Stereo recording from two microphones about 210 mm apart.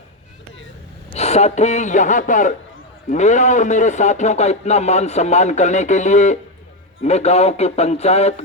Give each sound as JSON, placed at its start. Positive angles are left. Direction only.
{"t": 1.1, "sound": "a man's voice", "side_deg": 30}